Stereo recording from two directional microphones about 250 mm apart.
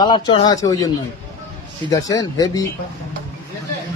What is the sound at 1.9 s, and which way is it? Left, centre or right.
Speech, centre.